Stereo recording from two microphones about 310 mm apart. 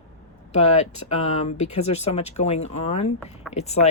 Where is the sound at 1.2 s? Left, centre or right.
Left.